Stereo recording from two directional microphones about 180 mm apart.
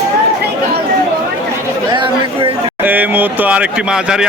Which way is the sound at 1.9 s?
25° right (ahead or behind).